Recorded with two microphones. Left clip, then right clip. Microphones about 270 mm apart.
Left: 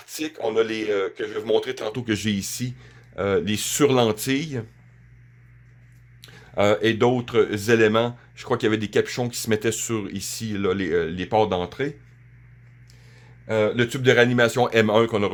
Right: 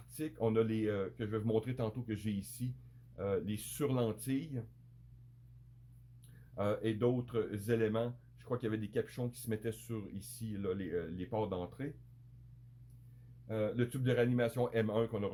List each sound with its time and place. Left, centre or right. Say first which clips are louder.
0.1 s speech: left 10 dB; left
6.2 s speech: left 17 dB; left
13.5 s speech: left 15 dB; left